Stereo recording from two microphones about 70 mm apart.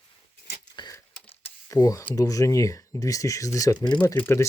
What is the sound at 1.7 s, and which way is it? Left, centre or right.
Speech, left.